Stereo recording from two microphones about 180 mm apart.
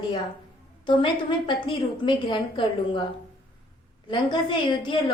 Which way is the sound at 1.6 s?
30° left (ahead or behind).